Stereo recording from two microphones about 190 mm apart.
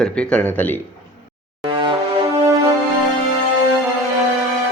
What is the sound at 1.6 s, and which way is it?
Music, 25° right (ahead or behind).